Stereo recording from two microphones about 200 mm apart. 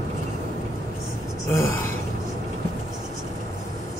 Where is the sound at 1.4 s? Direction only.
15° left (ahead or behind).